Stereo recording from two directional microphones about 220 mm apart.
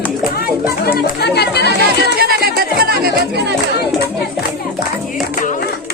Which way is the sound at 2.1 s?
45° right (ahead or behind).